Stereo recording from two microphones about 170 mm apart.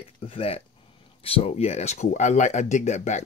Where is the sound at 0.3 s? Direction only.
35° left (ahead or behind).